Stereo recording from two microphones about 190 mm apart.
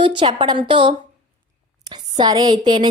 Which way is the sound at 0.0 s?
25° right (ahead or behind).